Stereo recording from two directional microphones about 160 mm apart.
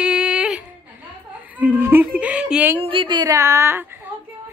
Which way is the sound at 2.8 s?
35° right (ahead or behind).